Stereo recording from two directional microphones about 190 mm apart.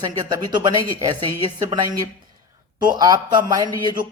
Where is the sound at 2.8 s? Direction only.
20° right (ahead or behind).